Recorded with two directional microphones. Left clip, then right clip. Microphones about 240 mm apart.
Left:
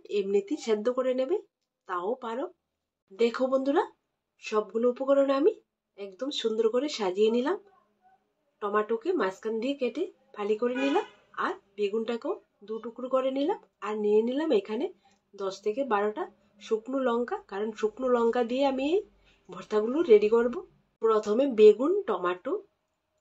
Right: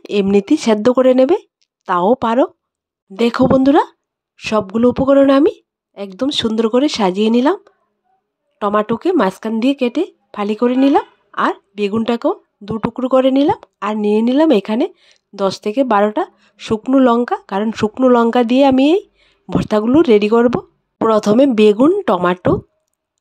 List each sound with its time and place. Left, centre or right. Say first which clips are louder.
0.0 s speech: right 12 dB; right